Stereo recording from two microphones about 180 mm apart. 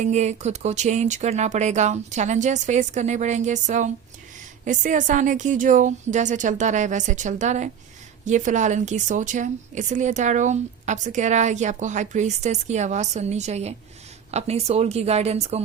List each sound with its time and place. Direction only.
0.0 s a woman's voice: 40° right (ahead or behind)